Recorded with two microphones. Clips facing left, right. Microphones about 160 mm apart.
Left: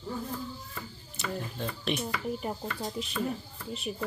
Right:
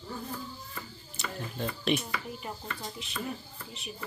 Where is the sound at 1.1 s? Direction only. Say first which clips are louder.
Left 2 dB; centre (ahead or behind).